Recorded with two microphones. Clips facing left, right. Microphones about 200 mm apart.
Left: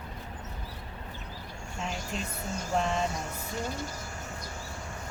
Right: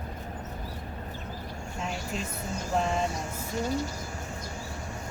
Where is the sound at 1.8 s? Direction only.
Centre (ahead or behind).